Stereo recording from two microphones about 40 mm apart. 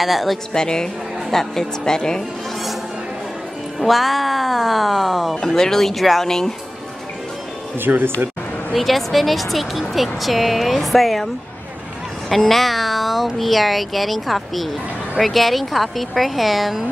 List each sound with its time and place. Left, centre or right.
0.0 s speech: centre
0.5 s speech: centre
3.8 s speech: centre
7.9 s speech: right
8.7 s speech: centre
12.3 s speech: centre